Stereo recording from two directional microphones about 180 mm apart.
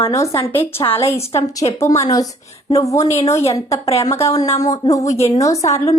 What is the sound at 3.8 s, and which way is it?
Speech, 35° left (ahead or behind).